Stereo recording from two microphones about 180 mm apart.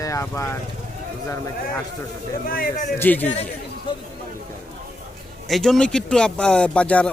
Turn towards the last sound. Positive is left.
turn(degrees=5)  # may be behind; listen again after turning